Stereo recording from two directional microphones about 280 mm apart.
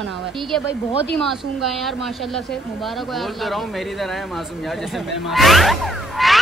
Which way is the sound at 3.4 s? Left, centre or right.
Centre.